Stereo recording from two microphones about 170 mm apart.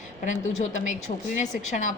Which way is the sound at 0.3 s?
45° left (ahead or behind).